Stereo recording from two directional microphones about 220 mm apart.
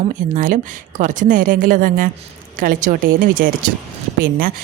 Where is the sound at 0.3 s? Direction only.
35° right (ahead or behind).